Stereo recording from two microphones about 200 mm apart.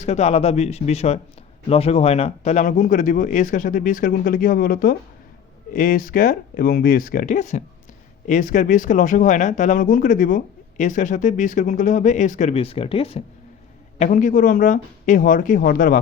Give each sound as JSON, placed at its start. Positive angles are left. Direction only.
{"t": 0.0, "sound": "speech", "side_deg": 35}
{"t": 14.0, "sound": "speech", "side_deg": 40}